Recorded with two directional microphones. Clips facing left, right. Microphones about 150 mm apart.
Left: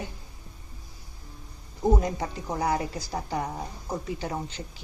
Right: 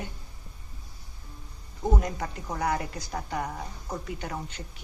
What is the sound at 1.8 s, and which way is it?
Speech, 30° left (ahead or behind).